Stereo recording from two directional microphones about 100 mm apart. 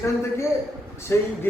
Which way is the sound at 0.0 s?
25° left (ahead or behind).